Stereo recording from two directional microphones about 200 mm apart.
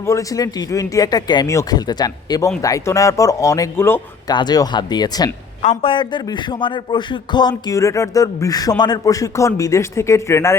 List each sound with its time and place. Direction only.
0.0 s speech: 15° left (ahead or behind)